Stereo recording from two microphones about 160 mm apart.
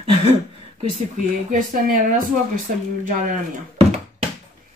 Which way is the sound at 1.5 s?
60° right (ahead or behind).